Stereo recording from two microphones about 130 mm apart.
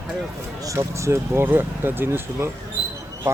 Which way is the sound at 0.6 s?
25° right (ahead or behind).